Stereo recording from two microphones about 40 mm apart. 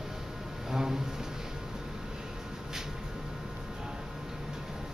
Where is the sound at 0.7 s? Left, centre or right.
Centre.